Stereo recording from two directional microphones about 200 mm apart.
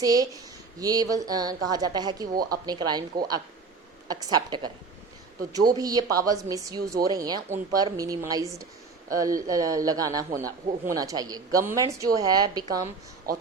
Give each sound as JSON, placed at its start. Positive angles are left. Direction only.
{"t": 0.0, "sound": "a woman's voice", "side_deg": -20}
{"t": 13.3, "sound": "a man's voice", "side_deg": -50}